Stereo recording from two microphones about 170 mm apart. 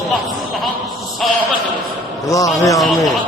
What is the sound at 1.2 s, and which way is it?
Speech, centre (ahead or behind).